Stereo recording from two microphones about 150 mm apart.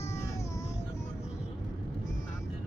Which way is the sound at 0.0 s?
20° left (ahead or behind).